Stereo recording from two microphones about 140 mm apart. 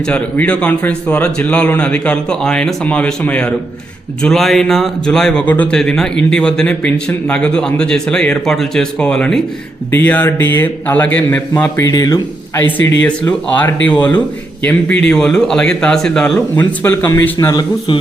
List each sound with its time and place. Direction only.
0.0 s a man's voice: 10° left (ahead or behind)
11.8 s speech: 25° left (ahead or behind)
12.6 s a man's voice: 10° left (ahead or behind)
17.5 s speech: 30° left (ahead or behind)